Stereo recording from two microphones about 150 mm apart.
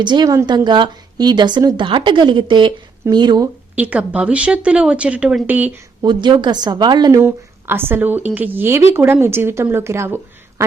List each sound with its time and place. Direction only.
0.0 s a woman's voice: 30° right (ahead or behind)
3.8 s speech: 10° right (ahead or behind)
6.0 s a woman's voice: 30° right (ahead or behind)
7.2 s speech: 15° right (ahead or behind)